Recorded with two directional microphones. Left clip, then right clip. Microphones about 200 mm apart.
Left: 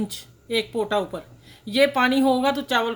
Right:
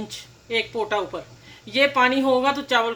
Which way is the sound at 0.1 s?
55° left (ahead or behind).